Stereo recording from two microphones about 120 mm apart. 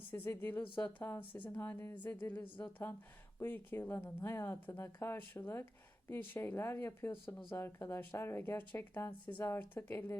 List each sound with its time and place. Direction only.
0.1 s a woman's voice: 15° left (ahead or behind)